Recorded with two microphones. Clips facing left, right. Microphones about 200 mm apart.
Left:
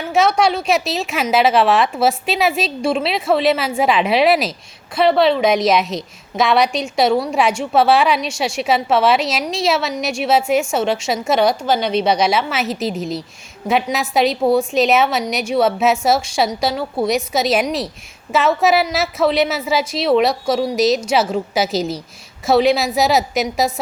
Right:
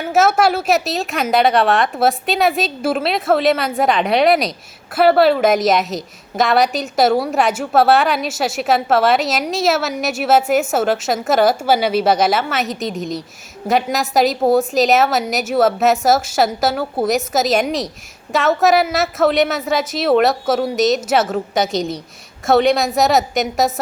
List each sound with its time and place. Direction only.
0.1 s a woman's voice: 5° right (ahead or behind)